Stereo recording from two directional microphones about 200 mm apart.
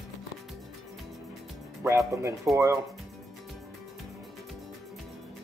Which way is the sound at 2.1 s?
15° right (ahead or behind).